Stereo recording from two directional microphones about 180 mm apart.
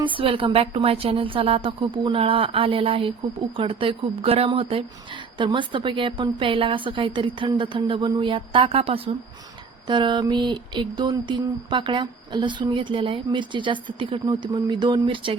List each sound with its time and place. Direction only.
0.0 s speech: 30° right (ahead or behind)